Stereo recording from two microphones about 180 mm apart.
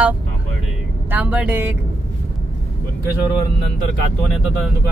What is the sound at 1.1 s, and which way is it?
Speech, 10° right (ahead or behind).